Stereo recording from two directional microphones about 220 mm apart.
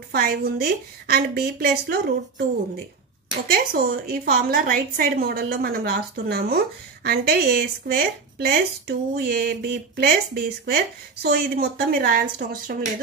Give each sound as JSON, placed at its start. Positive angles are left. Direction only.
{"t": 0.1, "sound": "a woman's voice", "side_deg": -45}
{"t": 3.4, "sound": "a woman's voice", "side_deg": -45}